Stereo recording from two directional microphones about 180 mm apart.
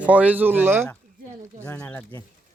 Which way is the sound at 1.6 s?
10° left (ahead or behind).